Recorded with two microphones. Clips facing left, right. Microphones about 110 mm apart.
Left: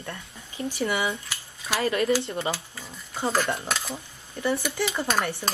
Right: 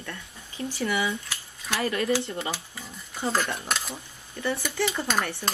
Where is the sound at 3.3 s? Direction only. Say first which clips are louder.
Left 2 dB; 15° left (ahead or behind).